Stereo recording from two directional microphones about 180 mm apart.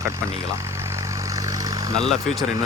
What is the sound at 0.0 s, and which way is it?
Vehicle, 15° right (ahead or behind).